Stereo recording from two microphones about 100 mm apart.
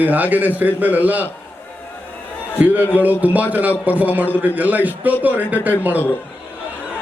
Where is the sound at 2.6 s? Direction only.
20° right (ahead or behind).